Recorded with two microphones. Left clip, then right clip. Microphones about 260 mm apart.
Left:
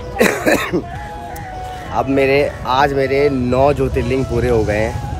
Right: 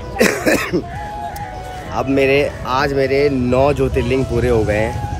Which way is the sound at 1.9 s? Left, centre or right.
Centre.